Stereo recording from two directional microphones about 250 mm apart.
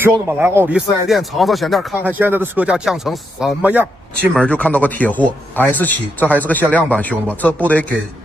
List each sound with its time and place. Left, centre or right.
0.0 s speech: centre
4.3 s speech: centre